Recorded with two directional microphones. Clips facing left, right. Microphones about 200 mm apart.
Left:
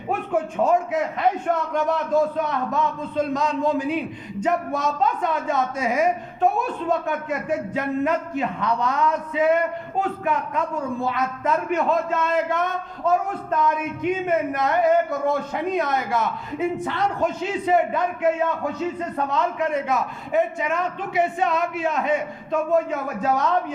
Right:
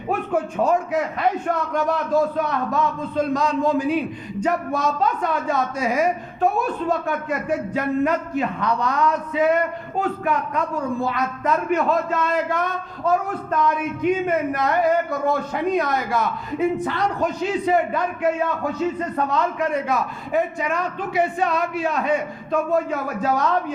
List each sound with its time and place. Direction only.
0.6 s a man's voice: 20° left (ahead or behind)